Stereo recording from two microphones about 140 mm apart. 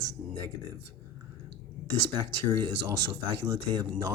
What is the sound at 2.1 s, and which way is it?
Speech, 35° right (ahead or behind).